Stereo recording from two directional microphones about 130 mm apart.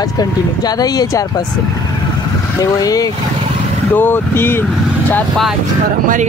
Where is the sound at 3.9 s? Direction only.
15° left (ahead or behind).